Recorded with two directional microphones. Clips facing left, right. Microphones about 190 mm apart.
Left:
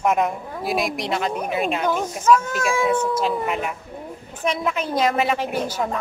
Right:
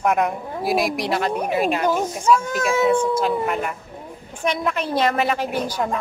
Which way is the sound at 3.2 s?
Centre (ahead or behind).